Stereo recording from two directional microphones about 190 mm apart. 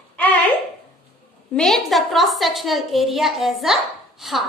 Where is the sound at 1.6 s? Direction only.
Centre (ahead or behind).